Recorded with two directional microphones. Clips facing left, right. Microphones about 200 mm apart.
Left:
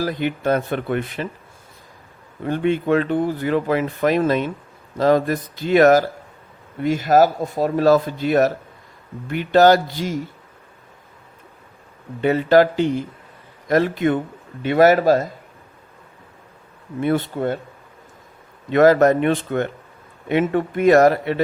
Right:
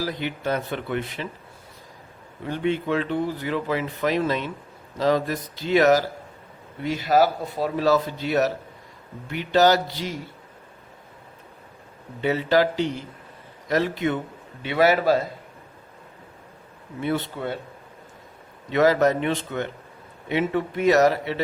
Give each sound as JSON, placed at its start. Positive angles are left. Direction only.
{"t": 0.0, "sound": "speech", "side_deg": 50}
{"t": 2.4, "sound": "speech", "side_deg": 50}
{"t": 12.2, "sound": "speech", "side_deg": 50}
{"t": 17.0, "sound": "speech", "side_deg": 50}
{"t": 18.7, "sound": "speech", "side_deg": 50}